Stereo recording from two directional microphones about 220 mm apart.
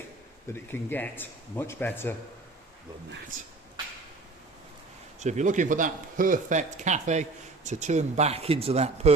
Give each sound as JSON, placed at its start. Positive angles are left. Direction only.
{"t": 0.7, "sound": "speech", "side_deg": 10}
{"t": 5.2, "sound": "speech", "side_deg": -35}